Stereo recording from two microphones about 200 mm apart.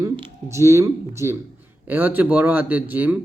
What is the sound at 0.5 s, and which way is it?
A man's voice, 15° right (ahead or behind).